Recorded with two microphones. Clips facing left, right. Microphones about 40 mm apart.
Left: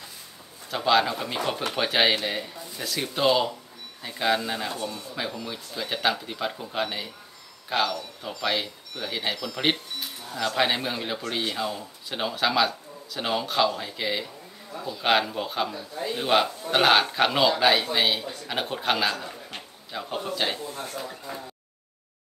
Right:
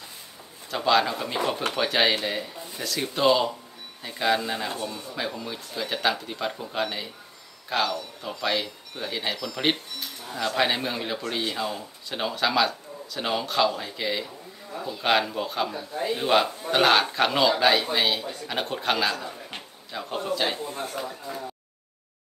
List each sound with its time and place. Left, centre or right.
0.7 s speech: centre
14.7 s a sound: centre
15.0 s speech: centre
15.9 s a man's voice: right
16.2 s a man's voice: centre
20.6 s a man's voice: right